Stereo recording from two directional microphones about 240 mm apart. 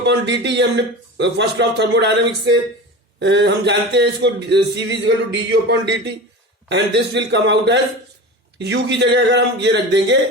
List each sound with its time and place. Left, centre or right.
0.0 s a man's voice: right